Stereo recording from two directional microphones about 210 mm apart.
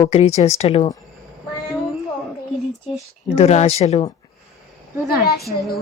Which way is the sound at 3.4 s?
30° left (ahead or behind).